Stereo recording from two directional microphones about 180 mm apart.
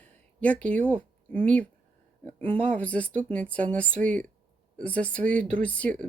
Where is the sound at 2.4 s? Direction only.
10° left (ahead or behind).